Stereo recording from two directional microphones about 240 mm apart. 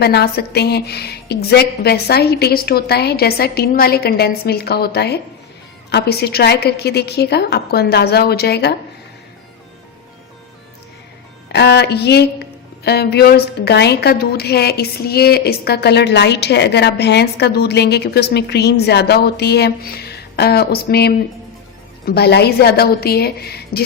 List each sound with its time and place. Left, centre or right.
0.0 s a woman's voice: left
11.5 s a woman's voice: left